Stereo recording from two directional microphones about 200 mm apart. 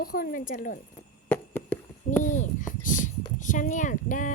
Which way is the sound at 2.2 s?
40° left (ahead or behind).